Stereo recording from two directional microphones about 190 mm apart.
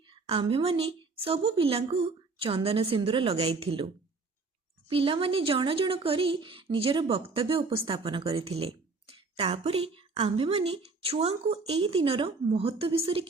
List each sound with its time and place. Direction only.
0.0 s a woman's voice: 30° right (ahead or behind)
4.9 s speech: 30° right (ahead or behind)